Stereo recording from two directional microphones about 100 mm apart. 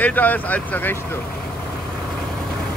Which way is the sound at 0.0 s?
15° left (ahead or behind).